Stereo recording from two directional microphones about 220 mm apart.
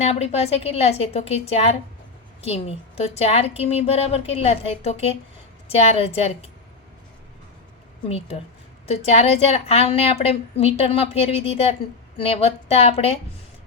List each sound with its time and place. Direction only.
0.0 s a woman's voice: 30° left (ahead or behind)
8.9 s a woman's voice: 30° left (ahead or behind)